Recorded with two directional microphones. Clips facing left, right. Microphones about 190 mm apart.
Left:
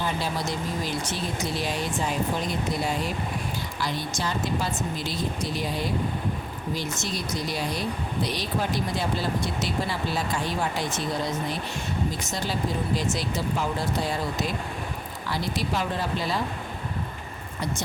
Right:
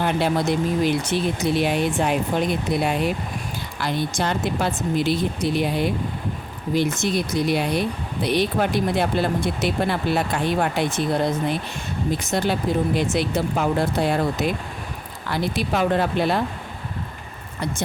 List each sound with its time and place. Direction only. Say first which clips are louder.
0.0 s speech: right 8 dB; 60° right (ahead or behind)
13.0 s speech: right 6 dB; 60° right (ahead or behind)